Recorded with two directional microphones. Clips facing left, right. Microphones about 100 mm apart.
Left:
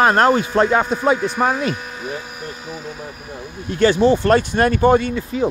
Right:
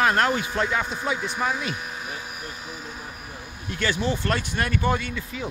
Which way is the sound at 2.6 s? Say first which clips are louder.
Left 7 dB; 90° left.